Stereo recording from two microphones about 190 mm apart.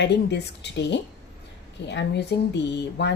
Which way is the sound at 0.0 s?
65° left (ahead or behind).